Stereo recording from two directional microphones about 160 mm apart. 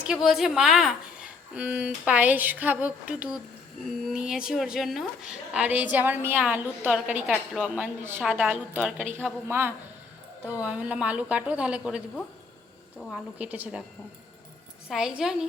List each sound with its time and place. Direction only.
0.0 s a woman's voice: 5° right (ahead or behind)
14.8 s a woman's voice: 5° right (ahead or behind)